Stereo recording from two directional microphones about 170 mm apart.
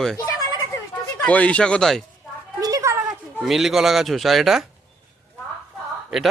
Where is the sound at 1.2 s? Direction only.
10° left (ahead or behind).